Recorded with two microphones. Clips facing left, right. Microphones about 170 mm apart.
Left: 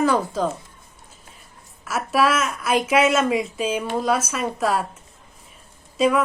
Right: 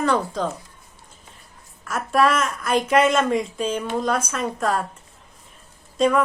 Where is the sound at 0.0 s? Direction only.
5° left (ahead or behind).